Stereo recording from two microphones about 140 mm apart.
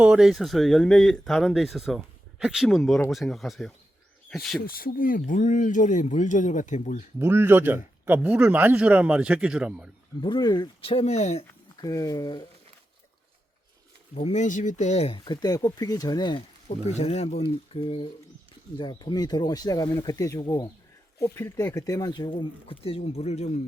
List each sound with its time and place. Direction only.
0.0 s speech: 5° right (ahead or behind)
4.6 s speech: 90° left; by 7.0 s 60° left (ahead or behind)
7.2 s speech: 20° right (ahead or behind)
10.2 s speech: 35° left (ahead or behind)
10.8 s speech: 45° left (ahead or behind)
11.8 s speech: 25° left (ahead or behind)
14.2 s speech: 55° left (ahead or behind)
15.2 s speech: 30° left (ahead or behind)
17.0 s speech: 45° left (ahead or behind)